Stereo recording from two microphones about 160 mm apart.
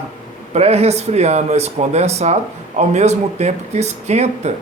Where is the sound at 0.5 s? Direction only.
40° right (ahead or behind).